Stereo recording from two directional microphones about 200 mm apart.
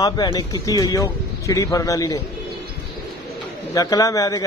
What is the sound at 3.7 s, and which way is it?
Speech, 15° left (ahead or behind).